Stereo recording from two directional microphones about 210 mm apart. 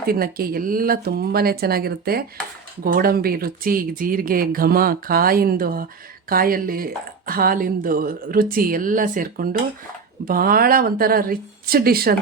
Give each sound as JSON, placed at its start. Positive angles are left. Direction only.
{"t": 0.0, "sound": "speech", "side_deg": -45}